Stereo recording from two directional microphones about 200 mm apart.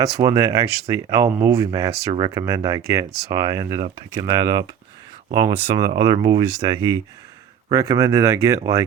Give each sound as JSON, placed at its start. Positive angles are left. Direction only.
{"t": 0.0, "sound": "speech", "side_deg": -15}